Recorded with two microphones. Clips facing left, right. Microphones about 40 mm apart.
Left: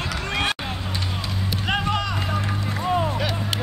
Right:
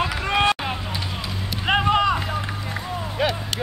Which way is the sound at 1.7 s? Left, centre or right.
Centre.